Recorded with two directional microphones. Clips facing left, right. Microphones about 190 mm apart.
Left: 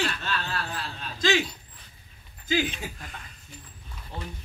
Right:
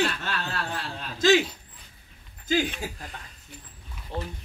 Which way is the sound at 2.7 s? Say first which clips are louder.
Right 3 dB; 35° right (ahead or behind).